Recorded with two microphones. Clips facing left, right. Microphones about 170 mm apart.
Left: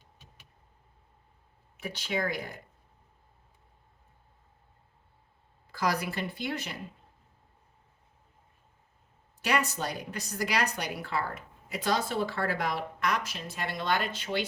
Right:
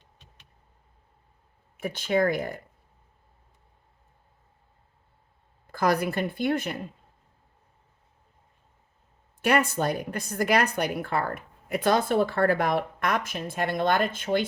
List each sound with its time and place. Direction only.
1.8 s speech: 50° right (ahead or behind)
5.6 s speech: 50° right (ahead or behind)
9.4 s speech: 55° right (ahead or behind)